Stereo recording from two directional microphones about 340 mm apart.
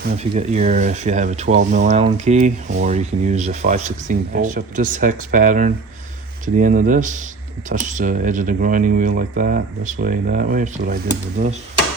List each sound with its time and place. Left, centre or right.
0.0 s speech: centre